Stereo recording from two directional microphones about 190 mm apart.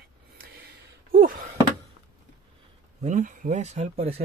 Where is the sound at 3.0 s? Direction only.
40° right (ahead or behind).